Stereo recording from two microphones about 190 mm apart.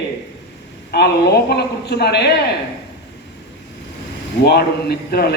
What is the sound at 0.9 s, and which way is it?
A man's voice, 60° left (ahead or behind).